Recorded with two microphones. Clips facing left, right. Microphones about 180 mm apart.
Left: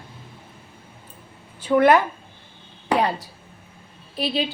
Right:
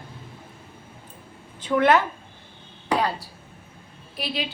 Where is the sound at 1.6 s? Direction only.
10° left (ahead or behind).